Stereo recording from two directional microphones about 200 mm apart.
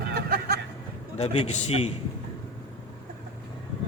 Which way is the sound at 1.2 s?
30° left (ahead or behind).